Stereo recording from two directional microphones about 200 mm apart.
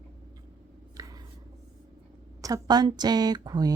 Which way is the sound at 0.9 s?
20° right (ahead or behind).